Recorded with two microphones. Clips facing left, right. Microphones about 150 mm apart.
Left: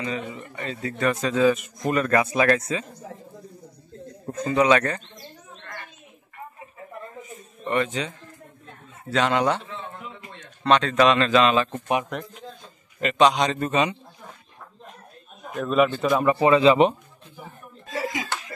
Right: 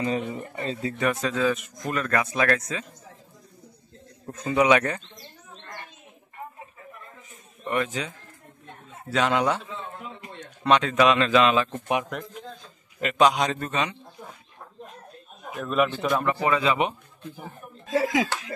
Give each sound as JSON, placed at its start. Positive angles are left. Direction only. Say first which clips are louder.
{"t": 0.0, "sound": "a man's voice", "louder": "right 3 dB", "side_deg": -35}
{"t": 0.9, "sound": "a man's voice", "louder": "left 3 dB", "side_deg": -5}
{"t": 1.3, "sound": "speech", "louder": "left 5 dB", "side_deg": 5}
{"t": 4.3, "sound": "a man's voice", "louder": "left 3 dB", "side_deg": 0}
{"t": 4.6, "sound": "a man's voice", "louder": "left 1 dB", "side_deg": -10}
{"t": 7.6, "sound": "speech", "louder": "left 2 dB", "side_deg": 0}
{"t": 9.1, "sound": "speech", "louder": "left 1 dB", "side_deg": 0}
{"t": 10.6, "sound": "a man's voice", "louder": "left 1 dB", "side_deg": -10}
{"t": 13.7, "sound": "speech", "louder": "left 5 dB", "side_deg": 10}
{"t": 15.5, "sound": "speech", "louder": "left 4 dB", "side_deg": 0}
{"t": 16.3, "sound": "speech", "louder": "left 7 dB", "side_deg": 25}